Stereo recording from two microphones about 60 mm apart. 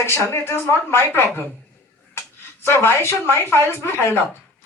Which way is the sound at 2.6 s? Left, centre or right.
Left.